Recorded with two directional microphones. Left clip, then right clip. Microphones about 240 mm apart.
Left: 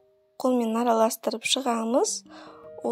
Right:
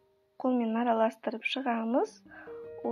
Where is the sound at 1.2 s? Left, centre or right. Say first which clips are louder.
Left 6 dB; left.